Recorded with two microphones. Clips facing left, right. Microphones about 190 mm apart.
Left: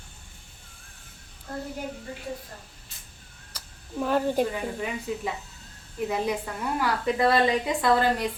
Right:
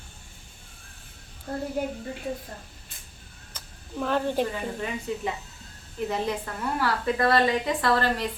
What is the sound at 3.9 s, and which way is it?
A woman's voice, 10° left (ahead or behind).